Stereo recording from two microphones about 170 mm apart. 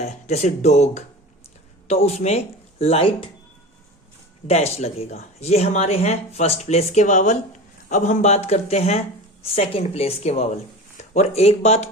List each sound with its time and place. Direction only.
0.0 s speech: 40° left (ahead or behind)
4.4 s speech: 40° left (ahead or behind)